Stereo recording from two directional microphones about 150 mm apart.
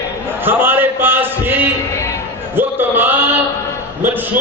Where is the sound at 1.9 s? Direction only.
20° left (ahead or behind).